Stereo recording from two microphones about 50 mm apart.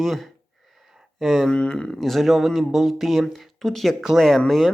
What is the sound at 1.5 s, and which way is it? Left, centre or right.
Speech, centre.